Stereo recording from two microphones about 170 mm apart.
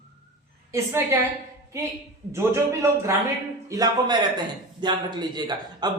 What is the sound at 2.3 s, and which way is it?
A man's voice, 15° right (ahead or behind).